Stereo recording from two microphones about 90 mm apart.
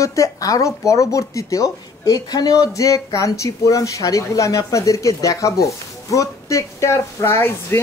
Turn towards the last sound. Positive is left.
turn(degrees=30)  # may be behind; listen again after turning